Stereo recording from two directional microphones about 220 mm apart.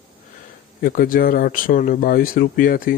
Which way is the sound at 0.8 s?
40° left (ahead or behind).